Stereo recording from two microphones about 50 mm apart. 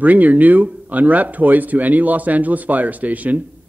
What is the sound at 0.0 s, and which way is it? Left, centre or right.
A man's voice, right.